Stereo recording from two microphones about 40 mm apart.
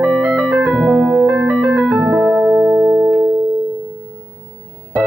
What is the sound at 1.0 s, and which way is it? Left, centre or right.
Keyboard, right.